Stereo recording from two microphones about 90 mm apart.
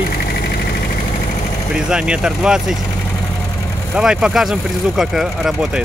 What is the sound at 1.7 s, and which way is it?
Speech, 10° right (ahead or behind).